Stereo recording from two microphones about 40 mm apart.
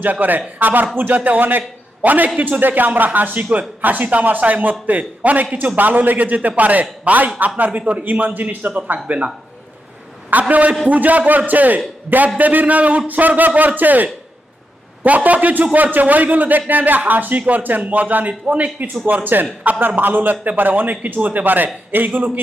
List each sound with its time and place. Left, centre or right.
0.0 s a man's voice: right
9.0 s a man's voice: right
10.5 s a man's voice: right